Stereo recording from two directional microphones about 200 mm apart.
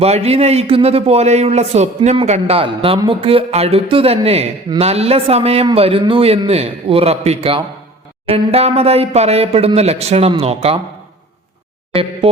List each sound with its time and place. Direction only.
0.0 s a man's voice: 30° right (ahead or behind)